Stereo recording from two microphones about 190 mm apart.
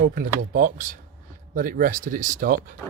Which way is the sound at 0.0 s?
45° right (ahead or behind).